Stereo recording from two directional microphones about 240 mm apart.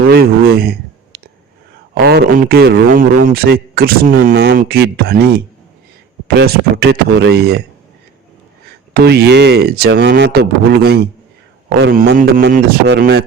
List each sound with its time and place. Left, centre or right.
0.1 s a sound: right
2.0 s a man's voice: right
6.2 s a man's voice: right
8.9 s a man's voice: right